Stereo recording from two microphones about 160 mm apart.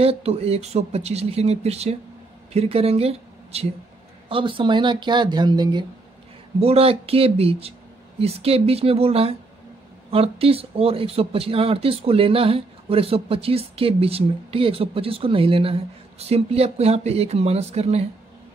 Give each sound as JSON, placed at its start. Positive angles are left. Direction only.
{"t": 0.0, "sound": "speech", "side_deg": -40}
{"t": 6.6, "sound": "speech", "side_deg": -40}